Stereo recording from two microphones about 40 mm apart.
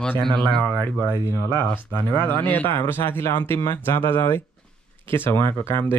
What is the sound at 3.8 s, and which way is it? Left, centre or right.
Speech, left.